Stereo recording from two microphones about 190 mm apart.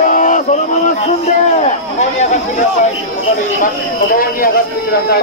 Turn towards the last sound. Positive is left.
turn(degrees=50)  # may be behind; listen again after turning